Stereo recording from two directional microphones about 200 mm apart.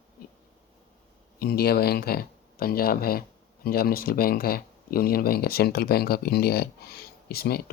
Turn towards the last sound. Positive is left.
turn(degrees=50)  # may be behind; listen again after turning